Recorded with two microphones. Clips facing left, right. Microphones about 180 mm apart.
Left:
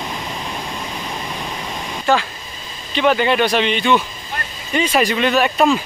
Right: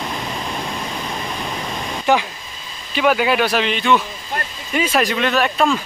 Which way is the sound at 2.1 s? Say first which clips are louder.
Even; 15° right (ahead or behind).